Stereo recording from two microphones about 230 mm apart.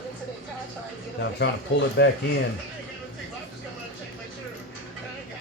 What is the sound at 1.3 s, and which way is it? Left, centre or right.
Speech, left.